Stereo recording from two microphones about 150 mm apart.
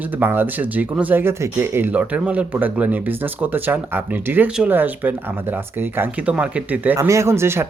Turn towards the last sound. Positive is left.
turn(degrees=-15)  # may be behind; listen again after turning